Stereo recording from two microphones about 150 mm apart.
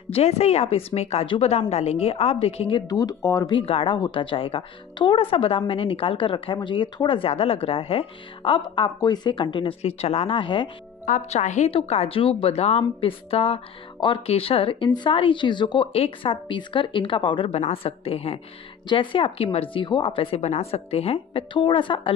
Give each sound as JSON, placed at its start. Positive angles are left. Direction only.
{"t": 0.1, "sound": "a woman's voice", "side_deg": 45}
{"t": 2.9, "sound": "speech", "side_deg": 25}
{"t": 3.5, "sound": "a woman's voice", "side_deg": 40}
{"t": 11.1, "sound": "a woman's voice", "side_deg": 50}